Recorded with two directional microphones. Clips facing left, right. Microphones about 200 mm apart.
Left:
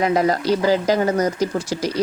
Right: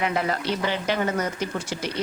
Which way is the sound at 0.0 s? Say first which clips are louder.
Left 7 dB; 40° left (ahead or behind).